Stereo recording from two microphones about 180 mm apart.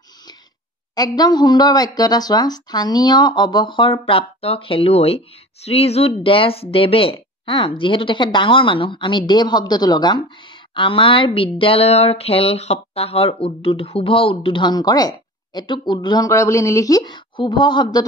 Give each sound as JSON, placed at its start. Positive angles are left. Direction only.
{"t": 0.9, "sound": "speech", "side_deg": 20}